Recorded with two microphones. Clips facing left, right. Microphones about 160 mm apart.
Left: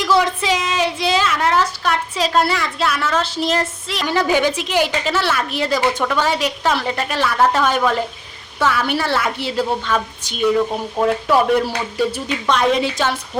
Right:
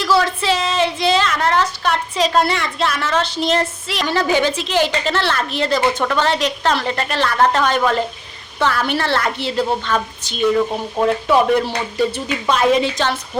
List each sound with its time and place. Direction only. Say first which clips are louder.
0.2 s a woman's voice: even; 15° left (ahead or behind)
4.0 s a woman's voice: even; 10° left (ahead or behind)
12.5 s a woman's voice: right 2 dB; 5° right (ahead or behind)